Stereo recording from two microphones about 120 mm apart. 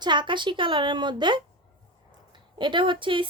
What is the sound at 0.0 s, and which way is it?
Speech, 40° right (ahead or behind).